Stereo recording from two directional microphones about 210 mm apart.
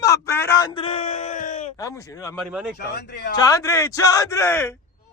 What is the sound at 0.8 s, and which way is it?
Speech, 30° left (ahead or behind).